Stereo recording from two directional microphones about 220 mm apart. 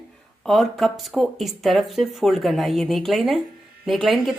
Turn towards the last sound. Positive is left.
turn(degrees=0)  # may be behind; listen again after turning